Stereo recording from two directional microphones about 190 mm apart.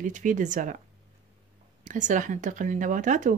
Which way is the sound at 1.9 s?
40° right (ahead or behind).